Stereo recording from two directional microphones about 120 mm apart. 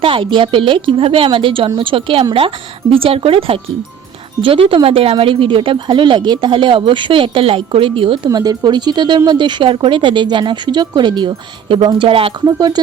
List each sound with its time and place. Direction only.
0.0 s speech: 45° right (ahead or behind)
8.3 s speech: 35° right (ahead or behind); by 12.3 s 50° right (ahead or behind)
12.5 s speech: 35° right (ahead or behind)